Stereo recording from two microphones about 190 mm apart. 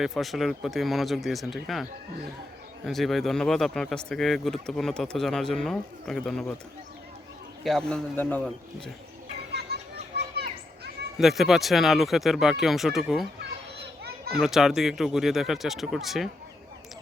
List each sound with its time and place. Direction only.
0.0 s speech: centre (ahead or behind)
7.6 s speech: centre (ahead or behind)
9.5 s children playing: 60° right (ahead or behind)
11.2 s speech: centre (ahead or behind)
13.4 s children playing: 60° right (ahead or behind)
14.3 s speech: centre (ahead or behind)